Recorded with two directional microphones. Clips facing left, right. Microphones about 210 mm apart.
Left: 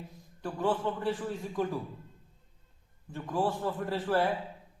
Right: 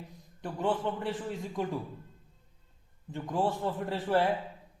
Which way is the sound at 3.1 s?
20° right (ahead or behind).